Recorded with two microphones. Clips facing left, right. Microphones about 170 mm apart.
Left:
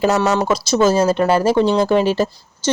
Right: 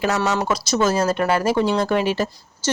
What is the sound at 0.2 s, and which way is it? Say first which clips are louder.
Speech: left 4 dB; 25° left (ahead or behind).